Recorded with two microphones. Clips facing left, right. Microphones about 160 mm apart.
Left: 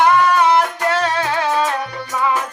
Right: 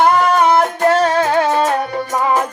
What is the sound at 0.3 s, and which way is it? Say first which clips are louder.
Music: right 2 dB; 45° right (ahead or behind).